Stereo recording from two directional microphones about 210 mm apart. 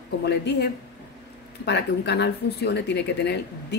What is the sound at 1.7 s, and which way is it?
Speech, 55° left (ahead or behind).